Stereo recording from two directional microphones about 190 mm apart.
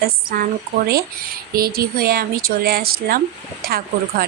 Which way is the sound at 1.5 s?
55° right (ahead or behind).